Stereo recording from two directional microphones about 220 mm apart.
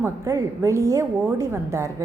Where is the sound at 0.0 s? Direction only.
15° right (ahead or behind).